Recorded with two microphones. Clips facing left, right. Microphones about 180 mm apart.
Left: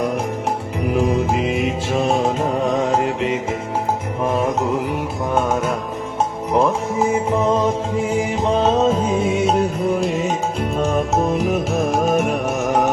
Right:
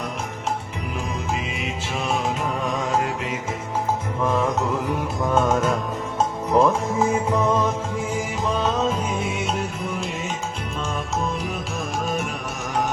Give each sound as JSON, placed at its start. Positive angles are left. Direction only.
{"t": 0.9, "sound": "music", "side_deg": 60}
{"t": 2.0, "sound": "music", "side_deg": 35}
{"t": 4.2, "sound": "music", "side_deg": 20}
{"t": 6.5, "sound": "music", "side_deg": 15}
{"t": 10.8, "sound": "music", "side_deg": 55}
{"t": 11.7, "sound": "music", "side_deg": 65}
{"t": 12.0, "sound": "music", "side_deg": 55}